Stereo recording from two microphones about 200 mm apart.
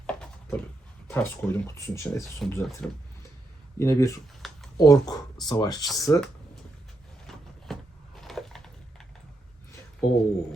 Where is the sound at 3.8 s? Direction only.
15° left (ahead or behind).